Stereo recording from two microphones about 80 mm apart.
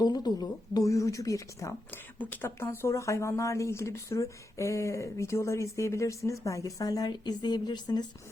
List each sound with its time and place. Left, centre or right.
0.0 s speech: left
2.1 s speech: left